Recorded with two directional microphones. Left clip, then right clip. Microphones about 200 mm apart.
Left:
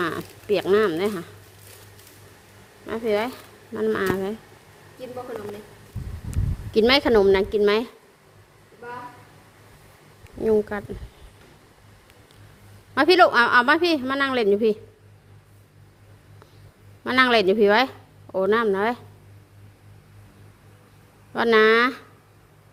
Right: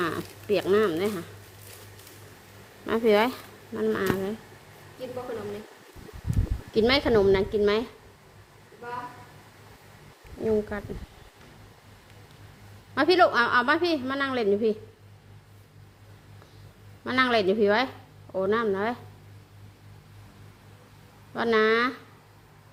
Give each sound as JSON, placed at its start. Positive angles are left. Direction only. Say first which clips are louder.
{"t": 0.0, "sound": "speech", "louder": "left 3 dB", "side_deg": 10}
{"t": 2.8, "sound": "speech", "louder": "right 2 dB", "side_deg": -15}
{"t": 3.8, "sound": "speech", "louder": "left 3 dB", "side_deg": 20}
{"t": 6.3, "sound": "speech", "louder": "left 4 dB", "side_deg": 35}
{"t": 10.4, "sound": "a woman's voice", "louder": "left 5 dB", "side_deg": 35}
{"t": 12.9, "sound": "a woman's voice", "louder": "left 5 dB", "side_deg": 35}
{"t": 17.0, "sound": "speech", "louder": "left 5 dB", "side_deg": 35}
{"t": 21.3, "sound": "a woman's voice", "louder": "left 6 dB", "side_deg": 40}